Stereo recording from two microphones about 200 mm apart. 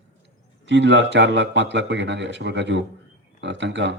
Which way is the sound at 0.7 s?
65° right (ahead or behind).